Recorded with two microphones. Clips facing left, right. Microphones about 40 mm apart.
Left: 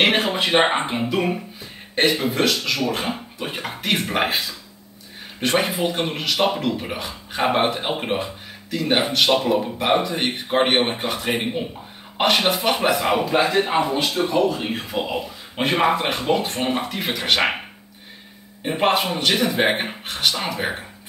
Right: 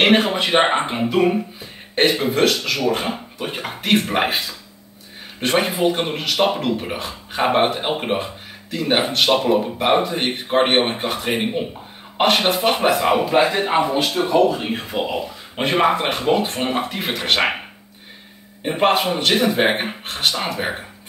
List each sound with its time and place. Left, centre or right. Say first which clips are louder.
0.0 s speech: right 3 dB; centre
4.1 s speech: right 2 dB; centre